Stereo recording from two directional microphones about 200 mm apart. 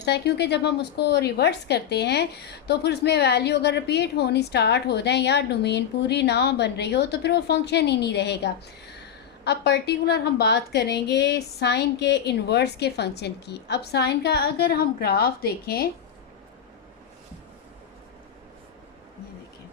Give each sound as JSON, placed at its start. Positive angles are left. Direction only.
{"t": 0.0, "sound": "a woman's voice", "side_deg": 55}